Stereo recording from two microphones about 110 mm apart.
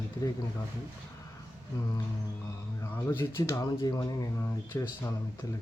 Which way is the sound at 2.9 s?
20° left (ahead or behind).